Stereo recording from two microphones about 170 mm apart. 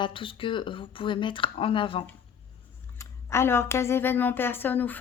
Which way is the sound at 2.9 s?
15° left (ahead or behind).